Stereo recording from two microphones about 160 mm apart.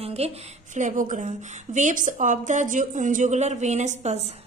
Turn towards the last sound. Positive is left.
turn(degrees=-45)  # may be behind; listen again after turning